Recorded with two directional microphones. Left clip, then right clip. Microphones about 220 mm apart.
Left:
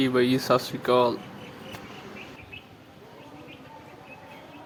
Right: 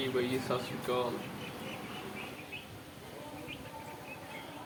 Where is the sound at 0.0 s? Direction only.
50° left (ahead or behind).